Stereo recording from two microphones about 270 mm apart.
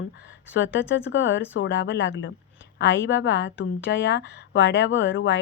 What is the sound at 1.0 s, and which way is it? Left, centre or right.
A woman's voice, left.